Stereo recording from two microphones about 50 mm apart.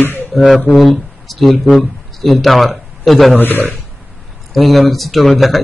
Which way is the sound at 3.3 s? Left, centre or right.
Left.